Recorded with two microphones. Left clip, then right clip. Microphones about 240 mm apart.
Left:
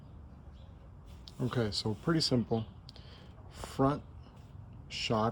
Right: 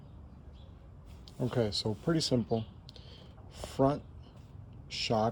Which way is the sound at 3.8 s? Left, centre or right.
Centre.